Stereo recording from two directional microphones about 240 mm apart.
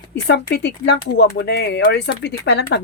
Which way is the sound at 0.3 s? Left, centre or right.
Left.